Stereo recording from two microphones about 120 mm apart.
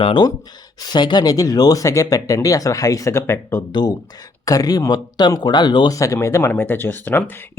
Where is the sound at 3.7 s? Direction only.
40° left (ahead or behind).